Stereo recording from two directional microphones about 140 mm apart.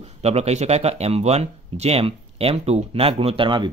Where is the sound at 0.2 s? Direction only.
50° right (ahead or behind).